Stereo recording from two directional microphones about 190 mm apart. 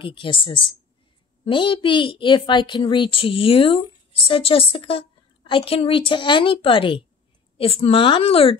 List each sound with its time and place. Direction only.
0.0 s a child's voice: 25° left (ahead or behind)